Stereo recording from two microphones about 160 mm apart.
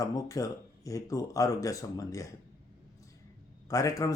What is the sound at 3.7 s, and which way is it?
Speech, 20° left (ahead or behind).